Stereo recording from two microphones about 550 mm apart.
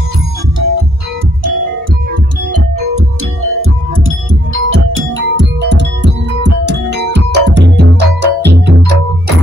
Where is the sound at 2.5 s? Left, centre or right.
Right.